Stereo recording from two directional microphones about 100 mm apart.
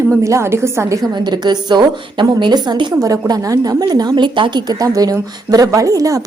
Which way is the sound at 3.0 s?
35° right (ahead or behind).